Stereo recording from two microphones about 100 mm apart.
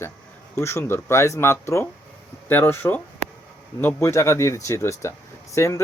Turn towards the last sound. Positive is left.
turn(degrees=30)  # may be behind; listen again after turning